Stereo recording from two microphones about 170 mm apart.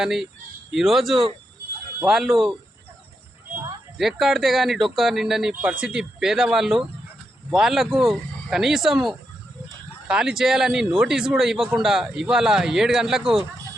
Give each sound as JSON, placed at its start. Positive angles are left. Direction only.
{"t": 0.0, "sound": "a man's voice", "side_deg": -5}
{"t": 3.9, "sound": "a man's voice", "side_deg": 0}